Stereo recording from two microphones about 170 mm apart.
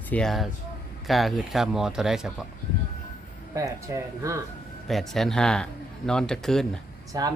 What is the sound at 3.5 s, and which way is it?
Speech, 20° right (ahead or behind).